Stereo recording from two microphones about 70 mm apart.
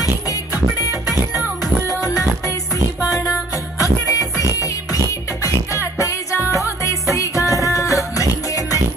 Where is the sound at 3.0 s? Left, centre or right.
Left.